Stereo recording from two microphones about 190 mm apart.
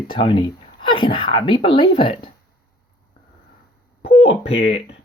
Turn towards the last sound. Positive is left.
turn(degrees=30)  # may be behind; listen again after turning